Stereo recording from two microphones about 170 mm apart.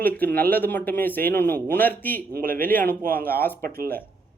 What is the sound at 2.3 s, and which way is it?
Speech, 60° right (ahead or behind).